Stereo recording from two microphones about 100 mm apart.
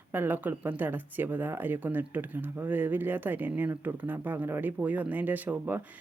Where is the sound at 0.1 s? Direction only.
20° right (ahead or behind).